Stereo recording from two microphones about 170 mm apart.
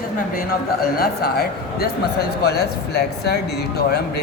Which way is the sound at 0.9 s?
65° left (ahead or behind).